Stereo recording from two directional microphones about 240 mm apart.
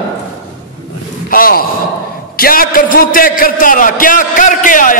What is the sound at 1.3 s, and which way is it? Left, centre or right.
A man's voice, left.